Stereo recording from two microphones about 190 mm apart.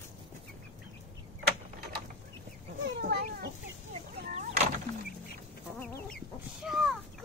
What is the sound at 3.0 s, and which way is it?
Children playing, 55° right (ahead or behind).